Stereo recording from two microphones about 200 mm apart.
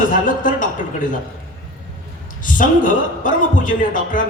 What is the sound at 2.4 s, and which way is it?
A man's voice, 40° left (ahead or behind).